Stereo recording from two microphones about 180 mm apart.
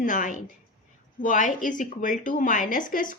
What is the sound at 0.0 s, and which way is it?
Speech, 45° left (ahead or behind).